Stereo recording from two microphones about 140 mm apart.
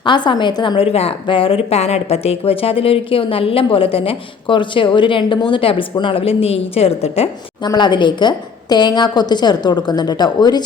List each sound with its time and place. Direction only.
0.0 s a woman's voice: 35° left (ahead or behind)
7.6 s a woman's voice: 30° left (ahead or behind)